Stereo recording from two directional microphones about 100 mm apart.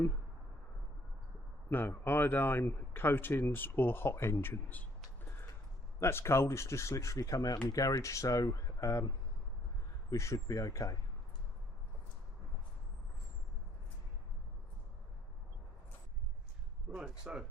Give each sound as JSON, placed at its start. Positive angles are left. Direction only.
{"t": 1.7, "sound": "speech", "side_deg": 20}
{"t": 6.0, "sound": "speech", "side_deg": 25}
{"t": 16.9, "sound": "speech", "side_deg": -10}